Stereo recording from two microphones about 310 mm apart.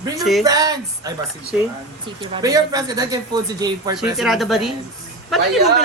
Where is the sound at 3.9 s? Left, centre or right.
Centre.